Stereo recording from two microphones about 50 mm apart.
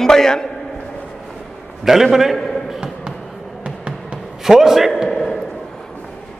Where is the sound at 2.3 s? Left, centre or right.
Centre.